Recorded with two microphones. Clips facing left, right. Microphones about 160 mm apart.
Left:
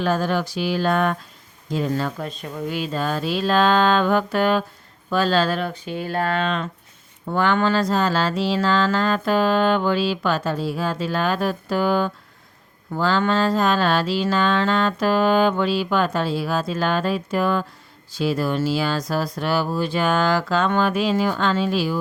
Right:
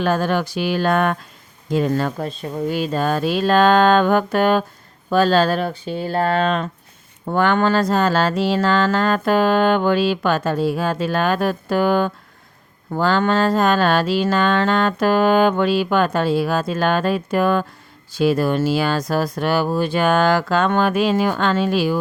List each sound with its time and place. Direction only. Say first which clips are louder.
0.0 s speech: right 2 dB; 60° right (ahead or behind)
2.0 s speech: right 4 dB; 40° right (ahead or behind); by 21.9 s 60° right (ahead or behind)